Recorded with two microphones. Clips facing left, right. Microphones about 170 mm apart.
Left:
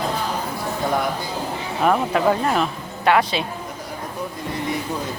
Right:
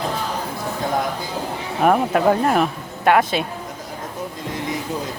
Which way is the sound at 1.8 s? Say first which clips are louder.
Right 2 dB; 45° right (ahead or behind).